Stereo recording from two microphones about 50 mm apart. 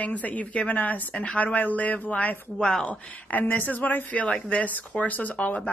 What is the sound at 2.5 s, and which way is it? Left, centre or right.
Speech, centre.